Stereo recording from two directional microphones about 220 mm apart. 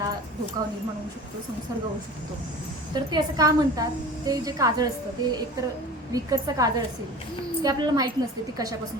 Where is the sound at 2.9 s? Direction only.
20° right (ahead or behind).